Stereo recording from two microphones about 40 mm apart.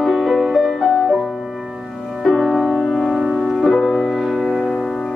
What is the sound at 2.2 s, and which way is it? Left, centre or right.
Music, centre.